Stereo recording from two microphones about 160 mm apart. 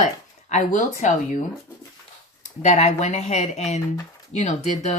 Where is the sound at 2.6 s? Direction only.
45° left (ahead or behind).